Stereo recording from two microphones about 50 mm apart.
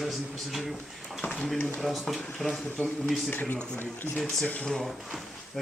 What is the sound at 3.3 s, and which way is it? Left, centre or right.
Speech, left.